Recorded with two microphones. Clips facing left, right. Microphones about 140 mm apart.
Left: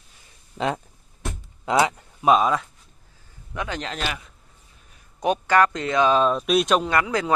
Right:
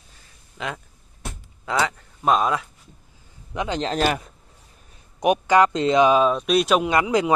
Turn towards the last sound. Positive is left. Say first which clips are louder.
# right 3 dB
turn(degrees=-20)  # may be behind; listen again after turning